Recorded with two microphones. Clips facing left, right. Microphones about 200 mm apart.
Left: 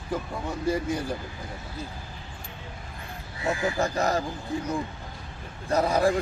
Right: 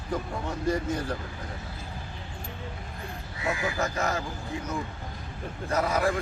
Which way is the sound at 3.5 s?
30° left (ahead or behind).